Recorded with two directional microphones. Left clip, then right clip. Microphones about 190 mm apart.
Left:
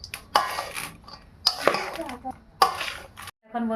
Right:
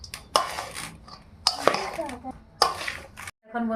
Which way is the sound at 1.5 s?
15° left (ahead or behind).